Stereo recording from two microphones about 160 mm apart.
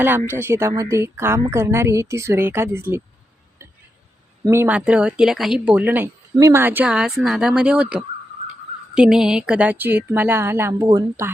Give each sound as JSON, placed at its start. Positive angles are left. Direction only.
{"t": 0.0, "sound": "a woman's voice", "side_deg": -10}
{"t": 3.6, "sound": "a sound", "side_deg": -20}
{"t": 4.4, "sound": "a woman's voice", "side_deg": -15}